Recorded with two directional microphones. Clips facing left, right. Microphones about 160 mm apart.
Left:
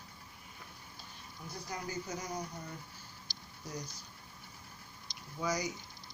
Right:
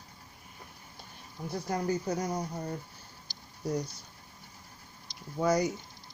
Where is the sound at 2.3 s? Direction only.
40° right (ahead or behind).